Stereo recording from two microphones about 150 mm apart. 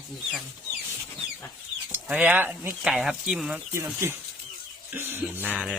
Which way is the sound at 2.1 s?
10° right (ahead or behind).